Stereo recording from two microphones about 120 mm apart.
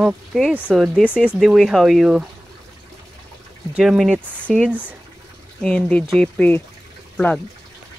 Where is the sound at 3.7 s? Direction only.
5° right (ahead or behind).